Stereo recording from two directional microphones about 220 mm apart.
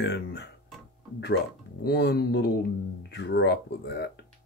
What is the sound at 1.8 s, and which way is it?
Speech, 45° left (ahead or behind).